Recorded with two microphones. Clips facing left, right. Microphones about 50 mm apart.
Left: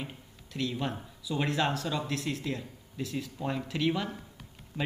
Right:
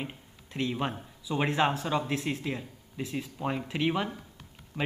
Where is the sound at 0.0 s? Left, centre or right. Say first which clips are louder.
Right 2 dB; right.